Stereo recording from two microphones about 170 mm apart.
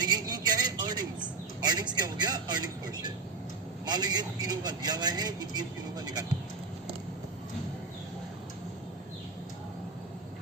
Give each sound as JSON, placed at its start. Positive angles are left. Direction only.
{"t": 0.0, "sound": "a sound", "side_deg": -25}
{"t": 1.6, "sound": "vehicle", "side_deg": -25}
{"t": 3.8, "sound": "speech", "side_deg": -25}